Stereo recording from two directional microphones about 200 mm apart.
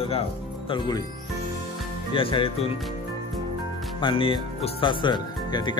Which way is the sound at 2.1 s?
25° left (ahead or behind).